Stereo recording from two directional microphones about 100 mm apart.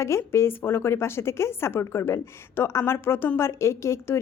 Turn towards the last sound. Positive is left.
turn(degrees=30)  # may be behind; listen again after turning